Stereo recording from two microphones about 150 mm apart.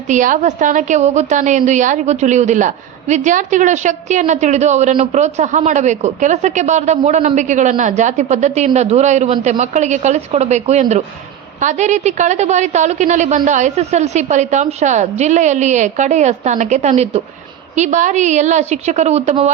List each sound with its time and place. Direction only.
0.1 s a woman's voice: 55° right (ahead or behind)